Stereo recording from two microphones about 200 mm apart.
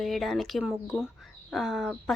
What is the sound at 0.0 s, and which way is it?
Speech, centre (ahead or behind).